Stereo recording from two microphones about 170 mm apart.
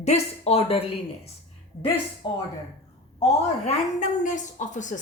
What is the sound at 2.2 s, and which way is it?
Speech, 30° left (ahead or behind).